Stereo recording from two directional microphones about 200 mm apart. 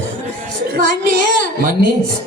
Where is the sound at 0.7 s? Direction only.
45° right (ahead or behind).